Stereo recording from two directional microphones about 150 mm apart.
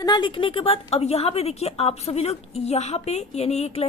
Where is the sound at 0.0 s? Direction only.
30° left (ahead or behind).